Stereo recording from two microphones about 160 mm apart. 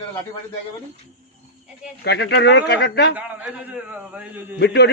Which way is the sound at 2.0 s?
90° left.